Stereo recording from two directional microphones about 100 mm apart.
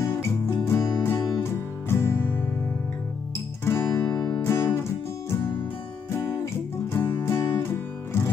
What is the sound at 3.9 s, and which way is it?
Music, 35° left (ahead or behind).